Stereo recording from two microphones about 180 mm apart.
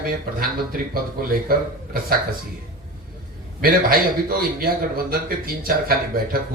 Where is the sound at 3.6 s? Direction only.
55° right (ahead or behind).